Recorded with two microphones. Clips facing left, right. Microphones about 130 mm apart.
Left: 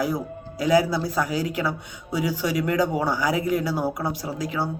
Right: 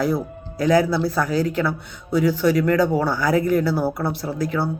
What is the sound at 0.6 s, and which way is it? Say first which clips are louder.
Speech: right 3 dB; 10° left (ahead or behind).